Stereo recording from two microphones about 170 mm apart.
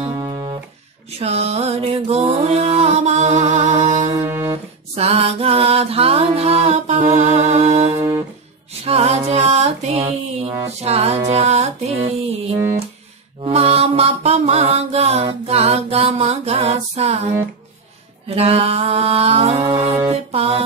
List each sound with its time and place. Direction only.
0.0 s music: 25° right (ahead or behind)
1.2 s music: 40° right (ahead or behind)
4.2 s music: 15° right (ahead or behind)
4.9 s mantra: 35° right (ahead or behind)
7.3 s music: 40° right (ahead or behind)
8.8 s mantra: 40° right (ahead or behind)
13.4 s mantra: 35° right (ahead or behind)
18.3 s mantra: 35° right (ahead or behind)
20.1 s music: 35° right (ahead or behind)